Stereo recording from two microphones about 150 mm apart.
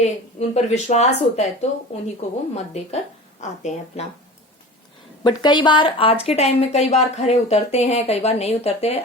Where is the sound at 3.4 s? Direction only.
50° left (ahead or behind).